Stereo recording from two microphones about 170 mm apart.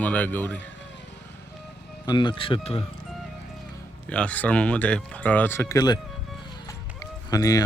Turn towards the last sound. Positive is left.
turn(degrees=20)  # may be behind; listen again after turning